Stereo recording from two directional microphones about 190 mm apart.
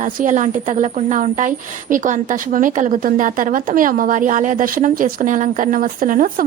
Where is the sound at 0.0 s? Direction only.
40° right (ahead or behind).